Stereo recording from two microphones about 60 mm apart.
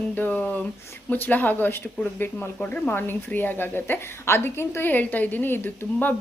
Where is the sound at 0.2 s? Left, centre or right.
Left.